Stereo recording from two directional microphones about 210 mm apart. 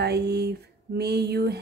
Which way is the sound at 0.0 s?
50° right (ahead or behind).